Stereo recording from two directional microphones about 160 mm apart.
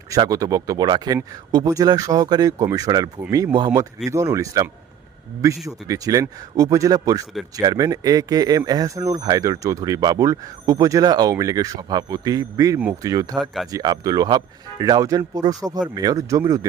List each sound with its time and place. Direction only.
0.1 s speech: 20° right (ahead or behind)
13.4 s speech: centre (ahead or behind)
13.7 s speech: 25° right (ahead or behind)